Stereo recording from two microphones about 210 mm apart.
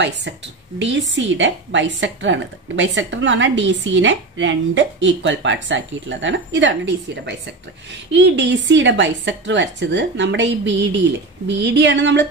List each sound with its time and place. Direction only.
0.7 s a woman's voice: 60° right (ahead or behind)